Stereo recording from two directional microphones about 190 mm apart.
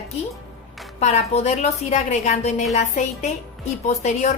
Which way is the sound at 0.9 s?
35° left (ahead or behind).